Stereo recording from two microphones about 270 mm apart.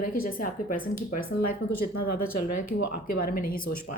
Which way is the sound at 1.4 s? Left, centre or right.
Left.